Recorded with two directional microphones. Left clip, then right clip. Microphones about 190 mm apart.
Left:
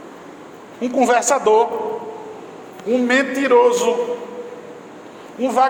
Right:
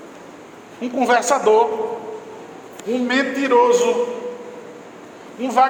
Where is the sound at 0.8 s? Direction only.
30° left (ahead or behind).